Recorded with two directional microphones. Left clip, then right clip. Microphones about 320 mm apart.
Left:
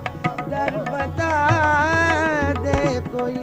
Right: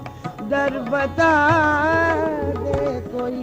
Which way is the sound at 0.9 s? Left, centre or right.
Right.